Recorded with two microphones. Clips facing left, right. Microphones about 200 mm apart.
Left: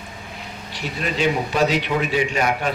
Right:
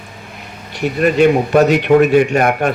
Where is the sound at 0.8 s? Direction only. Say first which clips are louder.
Right 11 dB; 55° right (ahead or behind).